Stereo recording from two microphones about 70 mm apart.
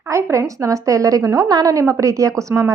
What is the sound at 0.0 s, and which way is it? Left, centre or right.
A woman's voice, right.